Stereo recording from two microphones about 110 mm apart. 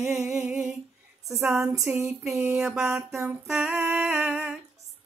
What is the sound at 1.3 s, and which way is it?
Speech, 5° right (ahead or behind).